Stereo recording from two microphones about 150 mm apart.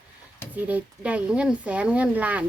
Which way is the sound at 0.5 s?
10° right (ahead or behind).